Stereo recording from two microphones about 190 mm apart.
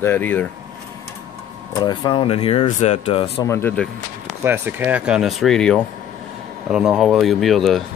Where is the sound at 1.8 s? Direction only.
25° left (ahead or behind).